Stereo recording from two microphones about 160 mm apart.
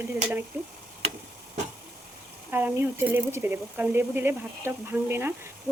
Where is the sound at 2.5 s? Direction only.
15° right (ahead or behind).